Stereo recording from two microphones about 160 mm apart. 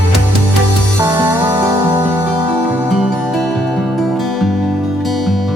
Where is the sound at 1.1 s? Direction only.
20° right (ahead or behind).